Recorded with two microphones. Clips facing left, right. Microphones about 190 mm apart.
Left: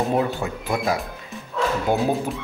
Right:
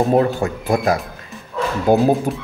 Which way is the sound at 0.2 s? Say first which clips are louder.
Right 6 dB; 50° right (ahead or behind).